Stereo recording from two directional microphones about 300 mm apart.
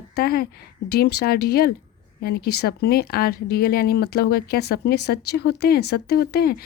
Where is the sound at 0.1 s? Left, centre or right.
Left.